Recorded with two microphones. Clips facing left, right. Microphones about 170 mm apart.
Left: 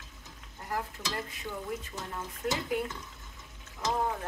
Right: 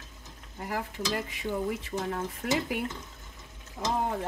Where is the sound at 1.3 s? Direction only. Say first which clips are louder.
Right 6 dB; 90° right.